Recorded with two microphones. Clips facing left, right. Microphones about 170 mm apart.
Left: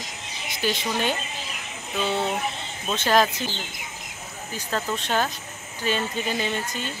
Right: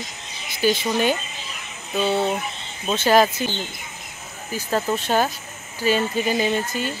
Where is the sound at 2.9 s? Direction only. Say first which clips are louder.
Right 4 dB; 5° right (ahead or behind).